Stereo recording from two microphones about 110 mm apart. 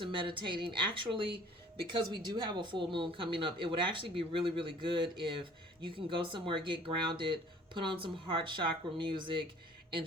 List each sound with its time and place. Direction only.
0.0 s speech: 50° right (ahead or behind)